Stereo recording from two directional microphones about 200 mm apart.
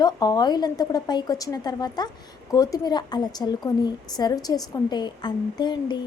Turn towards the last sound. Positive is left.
turn(degrees=20)  # may be behind; listen again after turning